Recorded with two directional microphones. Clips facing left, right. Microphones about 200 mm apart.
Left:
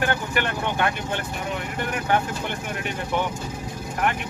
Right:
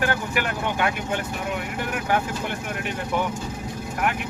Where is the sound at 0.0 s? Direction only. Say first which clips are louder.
Even; 5° right (ahead or behind).